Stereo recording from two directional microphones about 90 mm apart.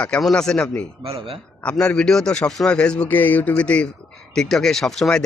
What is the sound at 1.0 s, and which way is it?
Speech, 90° right.